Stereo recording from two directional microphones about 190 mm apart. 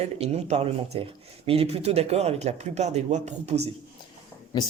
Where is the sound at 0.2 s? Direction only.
35° right (ahead or behind).